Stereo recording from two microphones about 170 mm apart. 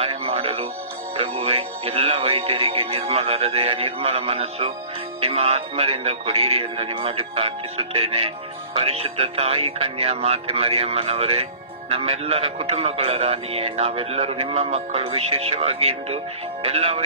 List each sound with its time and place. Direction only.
0.0 s music: 35° right (ahead or behind)
1.1 s a man's voice: 35° right (ahead or behind)